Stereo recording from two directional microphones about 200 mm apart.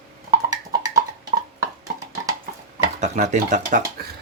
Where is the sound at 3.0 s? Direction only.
35° right (ahead or behind).